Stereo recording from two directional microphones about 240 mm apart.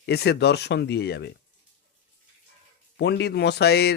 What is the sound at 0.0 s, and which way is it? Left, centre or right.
Speech, left.